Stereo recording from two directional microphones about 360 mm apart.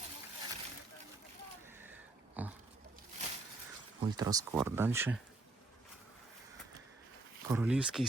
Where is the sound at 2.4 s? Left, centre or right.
Centre.